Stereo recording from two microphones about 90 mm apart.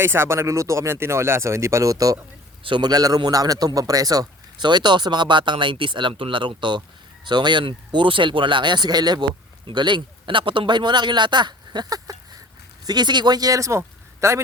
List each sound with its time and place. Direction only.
0.0 s speech: 25° right (ahead or behind)
2.6 s a man's voice: 55° right (ahead or behind)
9.6 s a man's voice: 60° right (ahead or behind); by 14.3 s 30° right (ahead or behind)